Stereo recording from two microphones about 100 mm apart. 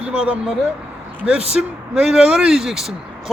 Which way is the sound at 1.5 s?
5° right (ahead or behind).